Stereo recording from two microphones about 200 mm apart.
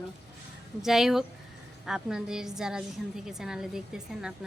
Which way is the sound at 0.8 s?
Centre (ahead or behind).